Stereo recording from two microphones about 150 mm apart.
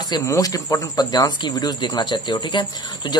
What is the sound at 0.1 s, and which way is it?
Speech, 20° left (ahead or behind).